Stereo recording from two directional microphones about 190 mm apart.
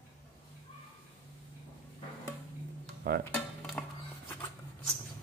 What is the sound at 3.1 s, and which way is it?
Dishes, 55° right (ahead or behind).